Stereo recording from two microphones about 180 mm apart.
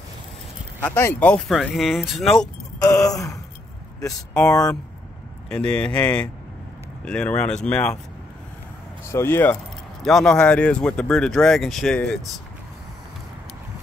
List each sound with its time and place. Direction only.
0.8 s speech: 10° left (ahead or behind)
3.1 s speech: 20° left (ahead or behind)
4.5 s speech: 20° left (ahead or behind)
5.5 s speech: 5° left (ahead or behind)
9.0 s speech: 15° left (ahead or behind)